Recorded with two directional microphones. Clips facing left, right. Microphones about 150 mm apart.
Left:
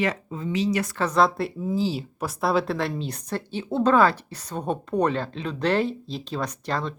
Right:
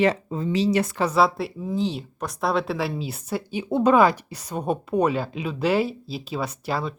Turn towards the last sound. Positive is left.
turn(degrees=-5)  # may be behind; listen again after turning